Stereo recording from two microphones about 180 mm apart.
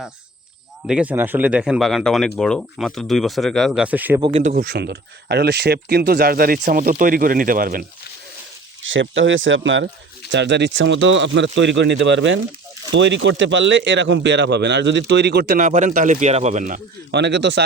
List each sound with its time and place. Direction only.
0.9 s speech: 5° right (ahead or behind)
4.2 s speech: 30° right (ahead or behind)
4.4 s speech: 55° right (ahead or behind)
8.8 s speech: 90° right
10.3 s speech: 80° right
15.5 s speech: 45° right (ahead or behind)
17.1 s speech: 70° right (ahead or behind)